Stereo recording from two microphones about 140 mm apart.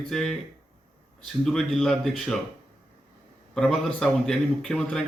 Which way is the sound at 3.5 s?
5° left (ahead or behind).